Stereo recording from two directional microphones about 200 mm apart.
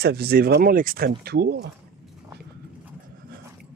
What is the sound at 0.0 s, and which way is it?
Speech, 50° right (ahead or behind).